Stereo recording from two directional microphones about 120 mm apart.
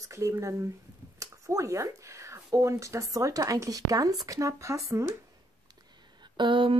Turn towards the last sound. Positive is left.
turn(degrees=-45)  # may be behind; listen again after turning